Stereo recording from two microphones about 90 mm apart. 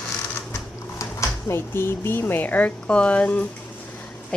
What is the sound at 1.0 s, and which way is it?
A woman's voice, 35° left (ahead or behind).